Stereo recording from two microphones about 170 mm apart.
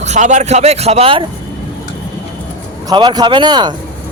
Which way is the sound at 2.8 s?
25° right (ahead or behind).